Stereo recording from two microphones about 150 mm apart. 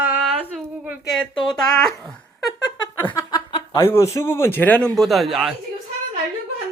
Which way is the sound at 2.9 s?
15° left (ahead or behind).